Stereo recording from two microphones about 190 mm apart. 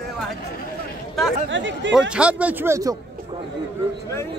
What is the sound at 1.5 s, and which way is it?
Speech, 70° right (ahead or behind).